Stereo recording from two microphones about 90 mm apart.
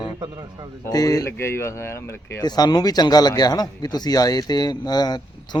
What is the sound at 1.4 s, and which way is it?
Speech, 30° left (ahead or behind).